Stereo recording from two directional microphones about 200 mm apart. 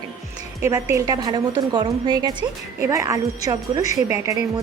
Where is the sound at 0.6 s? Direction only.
15° right (ahead or behind).